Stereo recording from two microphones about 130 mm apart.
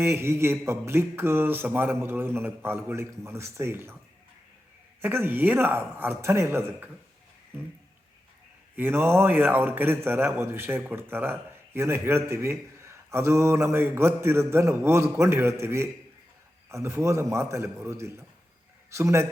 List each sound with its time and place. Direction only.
0.0 s a man's voice: 20° right (ahead or behind)
5.0 s a man's voice: 15° right (ahead or behind)
8.7 s a man's voice: 15° right (ahead or behind)